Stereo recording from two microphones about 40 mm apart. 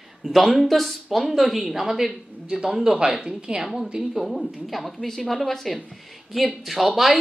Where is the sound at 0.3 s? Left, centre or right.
Centre; by 3.6 s right.